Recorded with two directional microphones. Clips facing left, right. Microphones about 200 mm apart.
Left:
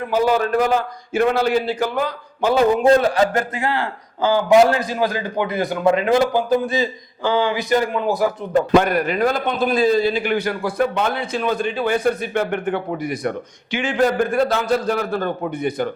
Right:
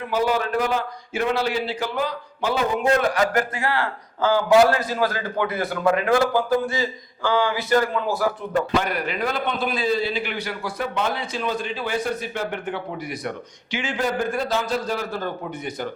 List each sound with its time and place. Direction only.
0.1 s a man's voice: 45° left (ahead or behind)
2.8 s a man's voice: 30° left (ahead or behind)
8.7 s a man's voice: 50° left (ahead or behind)